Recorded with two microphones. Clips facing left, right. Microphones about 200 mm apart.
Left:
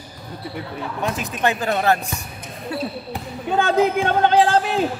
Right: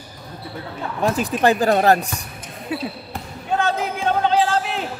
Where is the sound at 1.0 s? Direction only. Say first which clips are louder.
Right 5 dB; 35° right (ahead or behind).